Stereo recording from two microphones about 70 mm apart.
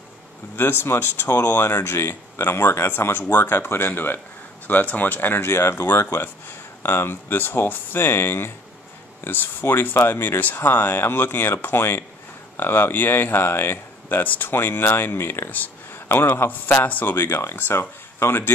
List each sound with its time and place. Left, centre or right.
0.6 s speech: left